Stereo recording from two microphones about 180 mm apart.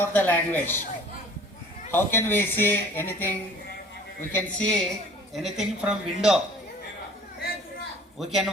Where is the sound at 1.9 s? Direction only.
10° left (ahead or behind); by 6.4 s 5° right (ahead or behind).